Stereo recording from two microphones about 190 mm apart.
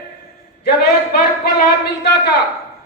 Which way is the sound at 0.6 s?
55° left (ahead or behind).